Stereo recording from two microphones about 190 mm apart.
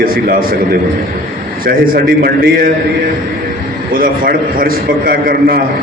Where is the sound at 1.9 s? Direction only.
50° right (ahead or behind).